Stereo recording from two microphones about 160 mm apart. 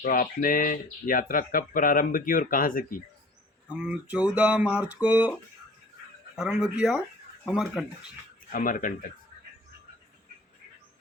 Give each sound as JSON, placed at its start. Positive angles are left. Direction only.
{"t": 0.0, "sound": "speech", "side_deg": 55}
{"t": 3.7, "sound": "speech", "side_deg": -5}
{"t": 6.3, "sound": "speech", "side_deg": -5}
{"t": 8.5, "sound": "speech", "side_deg": 60}